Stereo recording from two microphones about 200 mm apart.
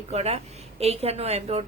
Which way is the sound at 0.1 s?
30° right (ahead or behind).